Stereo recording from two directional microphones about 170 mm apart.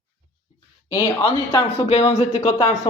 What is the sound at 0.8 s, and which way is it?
Speech, 20° left (ahead or behind).